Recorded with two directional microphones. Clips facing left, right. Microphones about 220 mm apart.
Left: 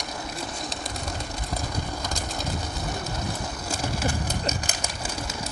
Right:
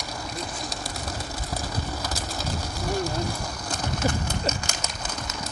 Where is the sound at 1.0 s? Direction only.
5° right (ahead or behind).